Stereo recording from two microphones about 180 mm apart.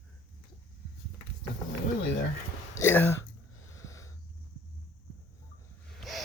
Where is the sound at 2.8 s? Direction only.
10° left (ahead or behind).